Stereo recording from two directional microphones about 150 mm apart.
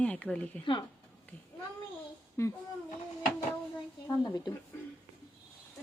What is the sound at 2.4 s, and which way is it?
Speech, 20° left (ahead or behind).